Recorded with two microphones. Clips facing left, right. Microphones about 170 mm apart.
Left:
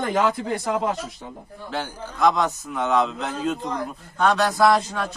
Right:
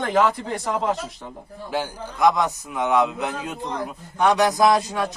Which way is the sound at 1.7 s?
15° right (ahead or behind).